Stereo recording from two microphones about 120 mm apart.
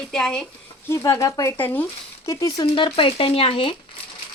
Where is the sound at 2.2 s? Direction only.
30° left (ahead or behind).